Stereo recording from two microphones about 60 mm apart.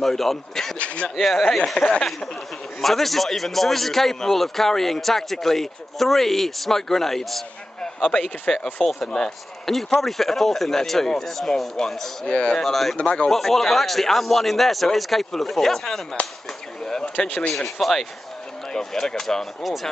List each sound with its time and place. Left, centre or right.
0.0 s a man's voice: centre
0.7 s speech: left
1.0 s a man's voice: centre
1.8 s a man's voice: centre
12.3 s speech: centre
12.6 s a man's voice: centre
12.9 s speech: centre
13.3 s a man's voice: centre
16.8 s a sound: centre
17.2 s speech: centre
17.6 s a man's voice: centre